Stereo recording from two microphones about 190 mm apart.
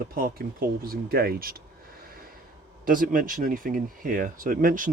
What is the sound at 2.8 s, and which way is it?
Speech, 45° right (ahead or behind).